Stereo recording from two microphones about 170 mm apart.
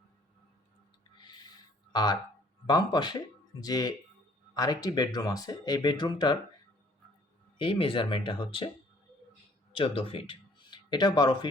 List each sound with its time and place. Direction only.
1.9 s speech: 25° left (ahead or behind)
7.6 s speech: 30° left (ahead or behind)
9.7 s speech: 30° left (ahead or behind)